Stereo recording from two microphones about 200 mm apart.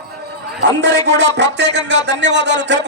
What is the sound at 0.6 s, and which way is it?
A man's voice, 60° right (ahead or behind).